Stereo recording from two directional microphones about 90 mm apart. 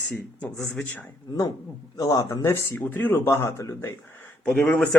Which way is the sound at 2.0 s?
45° left (ahead or behind).